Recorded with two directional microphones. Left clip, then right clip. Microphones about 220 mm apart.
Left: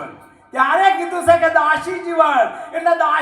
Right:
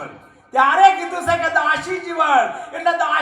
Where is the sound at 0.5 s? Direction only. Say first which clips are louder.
Right 2 dB; 15° right (ahead or behind).